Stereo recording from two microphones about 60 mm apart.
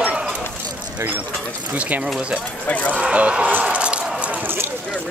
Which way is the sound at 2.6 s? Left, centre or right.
Left.